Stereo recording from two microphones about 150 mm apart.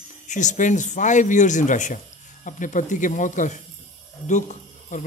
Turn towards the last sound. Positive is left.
turn(degrees=55)  # may be behind; listen again after turning